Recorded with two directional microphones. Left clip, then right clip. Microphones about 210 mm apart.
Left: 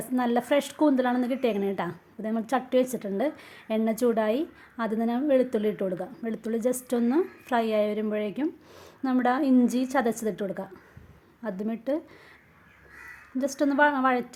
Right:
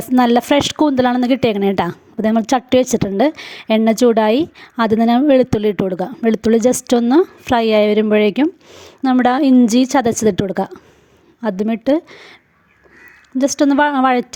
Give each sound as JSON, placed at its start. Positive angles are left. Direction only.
{"t": 0.1, "sound": "speech", "side_deg": -40}
{"t": 8.7, "sound": "speech", "side_deg": -30}
{"t": 13.4, "sound": "speech", "side_deg": -35}